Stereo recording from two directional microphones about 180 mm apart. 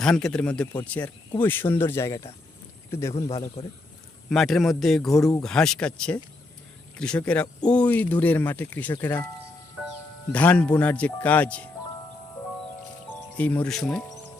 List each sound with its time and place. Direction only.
0.0 s speech: 5° left (ahead or behind)
3.6 s speech: 30° left (ahead or behind)
4.3 s speech: centre (ahead or behind)
10.3 s speech: 10° left (ahead or behind)
13.3 s speech: 10° left (ahead or behind)